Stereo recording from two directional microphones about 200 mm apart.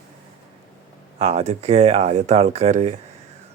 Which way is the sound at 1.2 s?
30° right (ahead or behind).